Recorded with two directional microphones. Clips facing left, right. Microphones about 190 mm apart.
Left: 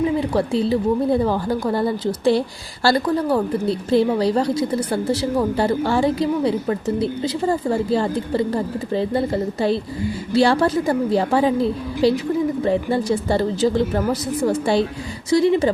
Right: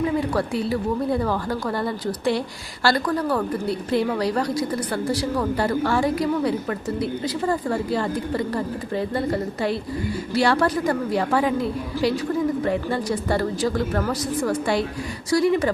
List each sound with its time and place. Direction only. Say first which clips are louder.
0.3 s a woman's voice: left 4 dB; 25° left (ahead or behind)